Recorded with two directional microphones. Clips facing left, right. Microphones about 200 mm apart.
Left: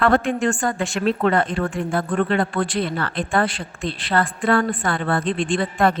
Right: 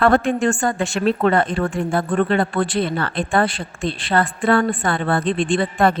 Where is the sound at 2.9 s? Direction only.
25° right (ahead or behind).